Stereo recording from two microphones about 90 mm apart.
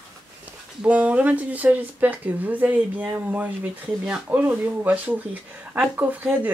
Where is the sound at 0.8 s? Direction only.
15° right (ahead or behind).